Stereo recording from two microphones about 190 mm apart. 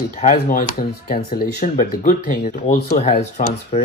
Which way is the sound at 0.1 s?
45° left (ahead or behind).